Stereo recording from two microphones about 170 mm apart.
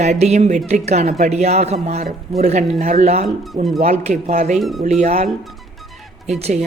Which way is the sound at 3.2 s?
Centre (ahead or behind).